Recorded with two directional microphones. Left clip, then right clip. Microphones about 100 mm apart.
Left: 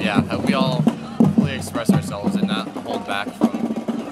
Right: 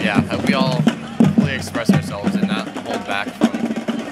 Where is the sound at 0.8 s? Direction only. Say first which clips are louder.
Right 2 dB; 15° right (ahead or behind).